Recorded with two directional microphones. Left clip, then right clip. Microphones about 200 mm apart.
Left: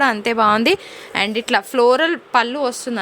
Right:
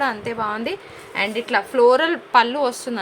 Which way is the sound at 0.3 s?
55° left (ahead or behind).